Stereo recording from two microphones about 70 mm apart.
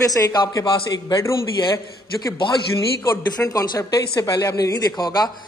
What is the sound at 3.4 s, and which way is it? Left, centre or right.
A man's voice, left.